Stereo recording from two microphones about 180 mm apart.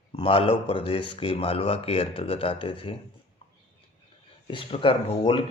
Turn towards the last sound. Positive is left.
turn(degrees=30)  # may be behind; listen again after turning